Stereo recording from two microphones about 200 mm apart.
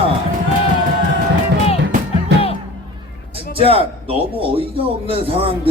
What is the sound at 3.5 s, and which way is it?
A man's voice, 30° right (ahead or behind).